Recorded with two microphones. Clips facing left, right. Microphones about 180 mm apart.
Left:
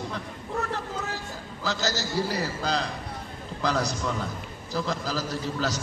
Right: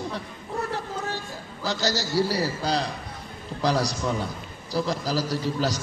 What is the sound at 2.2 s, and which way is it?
A man's voice, 35° right (ahead or behind).